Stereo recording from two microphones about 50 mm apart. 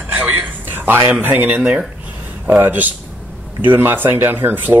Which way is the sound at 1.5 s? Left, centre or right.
Centre.